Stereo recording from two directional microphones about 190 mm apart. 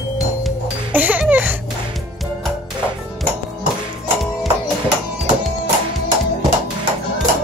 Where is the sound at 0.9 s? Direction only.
10° right (ahead or behind).